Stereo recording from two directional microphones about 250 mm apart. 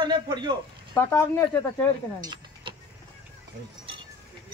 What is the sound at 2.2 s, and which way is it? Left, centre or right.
Vehicle, centre.